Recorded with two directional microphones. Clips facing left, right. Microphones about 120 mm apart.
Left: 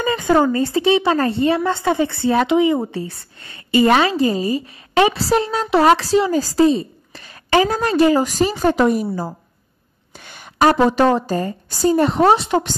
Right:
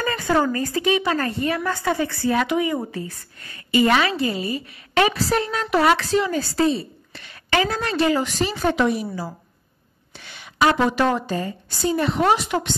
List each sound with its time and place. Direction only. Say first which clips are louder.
0.0 s a woman's voice: left 5 dB; 20° left (ahead or behind); by 9.0 s 40° left (ahead or behind)
10.1 s a sound: left 3 dB; 45° left (ahead or behind)
10.9 s a woman's voice: left 5 dB; 35° left (ahead or behind)